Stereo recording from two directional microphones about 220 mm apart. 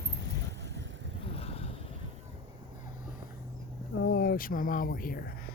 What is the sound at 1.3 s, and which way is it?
Vehicle, 25° left (ahead or behind).